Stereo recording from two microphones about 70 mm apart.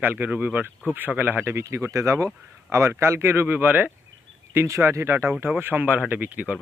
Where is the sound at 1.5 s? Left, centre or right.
Right.